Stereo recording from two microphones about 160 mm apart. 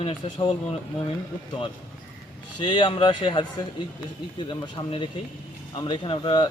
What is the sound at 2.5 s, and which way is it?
Speech, 30° left (ahead or behind).